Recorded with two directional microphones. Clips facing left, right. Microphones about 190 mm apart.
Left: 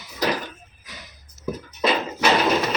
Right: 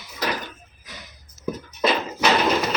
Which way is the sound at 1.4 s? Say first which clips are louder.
Even; centre (ahead or behind).